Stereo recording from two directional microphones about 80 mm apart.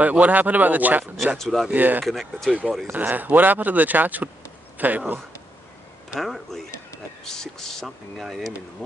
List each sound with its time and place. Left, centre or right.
0.0 s speech: centre
1.1 s speech: centre
1.7 s speech: right
2.5 s speech: centre
2.9 s speech: right
6.1 s speech: centre